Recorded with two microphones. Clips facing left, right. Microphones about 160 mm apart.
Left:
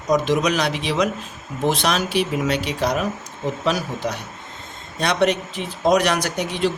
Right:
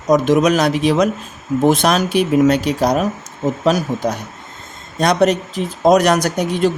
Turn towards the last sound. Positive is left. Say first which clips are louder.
# right 6 dB
turn(degrees=-45)  # may be behind; listen again after turning